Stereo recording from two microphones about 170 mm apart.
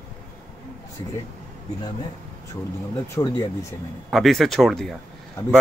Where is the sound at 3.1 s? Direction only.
20° left (ahead or behind).